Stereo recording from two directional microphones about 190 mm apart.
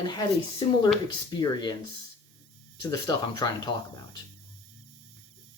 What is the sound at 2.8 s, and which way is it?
Speech, 20° left (ahead or behind).